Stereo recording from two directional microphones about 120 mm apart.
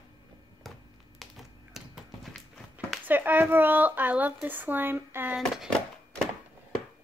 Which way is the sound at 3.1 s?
15° right (ahead or behind).